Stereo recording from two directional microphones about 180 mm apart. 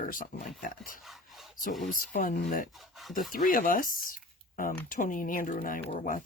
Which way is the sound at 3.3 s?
50° left (ahead or behind).